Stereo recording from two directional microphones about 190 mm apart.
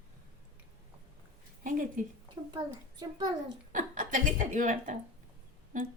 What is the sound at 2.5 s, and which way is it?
Speech, 20° right (ahead or behind).